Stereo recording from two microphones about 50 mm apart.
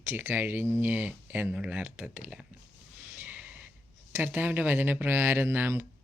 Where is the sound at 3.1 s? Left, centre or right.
Right.